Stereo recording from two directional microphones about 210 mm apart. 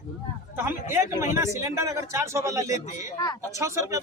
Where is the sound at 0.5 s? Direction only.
10° right (ahead or behind).